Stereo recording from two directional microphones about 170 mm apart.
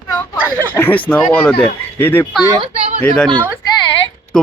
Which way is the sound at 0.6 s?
10° left (ahead or behind).